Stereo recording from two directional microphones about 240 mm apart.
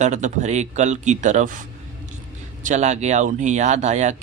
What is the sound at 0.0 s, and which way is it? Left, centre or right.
Speech, right.